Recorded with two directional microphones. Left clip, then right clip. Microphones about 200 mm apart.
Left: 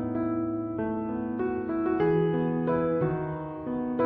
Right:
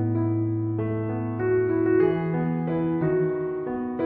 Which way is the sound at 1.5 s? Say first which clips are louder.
Right 12 dB; centre (ahead or behind).